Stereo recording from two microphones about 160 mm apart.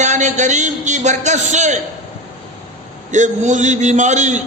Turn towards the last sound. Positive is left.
turn(degrees=-50)  # may be behind; listen again after turning